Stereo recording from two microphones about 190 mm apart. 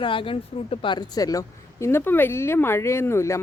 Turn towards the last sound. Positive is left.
turn(degrees=15)  # may be behind; listen again after turning